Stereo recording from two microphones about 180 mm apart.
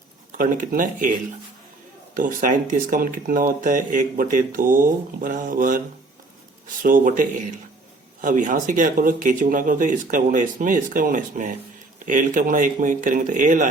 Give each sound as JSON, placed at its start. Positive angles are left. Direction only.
{"t": 0.3, "sound": "speech", "side_deg": -50}
{"t": 2.1, "sound": "speech", "side_deg": -50}